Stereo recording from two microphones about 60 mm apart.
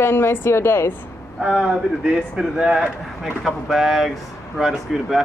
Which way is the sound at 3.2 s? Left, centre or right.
Centre.